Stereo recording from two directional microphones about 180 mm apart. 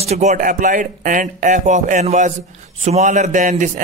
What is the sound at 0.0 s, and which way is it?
A man's voice, 40° right (ahead or behind).